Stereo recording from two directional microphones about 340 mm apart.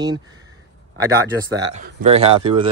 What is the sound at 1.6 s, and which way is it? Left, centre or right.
Speech, centre.